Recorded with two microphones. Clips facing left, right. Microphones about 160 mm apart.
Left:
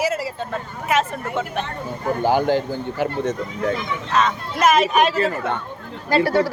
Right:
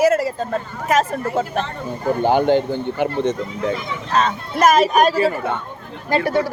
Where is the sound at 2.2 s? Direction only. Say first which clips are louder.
Right 3 dB; 20° right (ahead or behind).